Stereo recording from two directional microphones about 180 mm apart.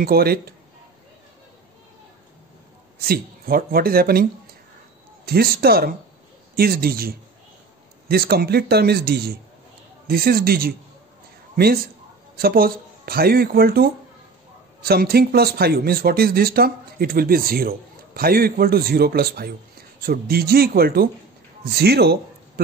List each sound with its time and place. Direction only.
0.0 s speech: 60° right (ahead or behind)
3.0 s a man's voice: 55° right (ahead or behind)